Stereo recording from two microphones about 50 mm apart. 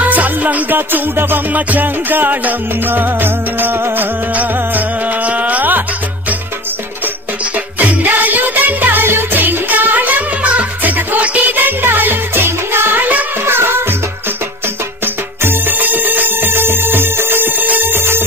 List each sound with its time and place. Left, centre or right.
0.0 s music: right
0.7 s music: right
7.8 s music: right
15.4 s music: right